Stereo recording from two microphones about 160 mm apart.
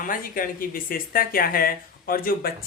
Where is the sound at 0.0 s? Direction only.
60° left (ahead or behind).